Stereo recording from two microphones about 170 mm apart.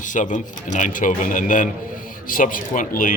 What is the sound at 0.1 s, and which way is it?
A man's voice, 50° left (ahead or behind).